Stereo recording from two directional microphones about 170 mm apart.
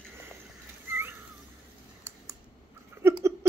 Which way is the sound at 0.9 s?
15° right (ahead or behind).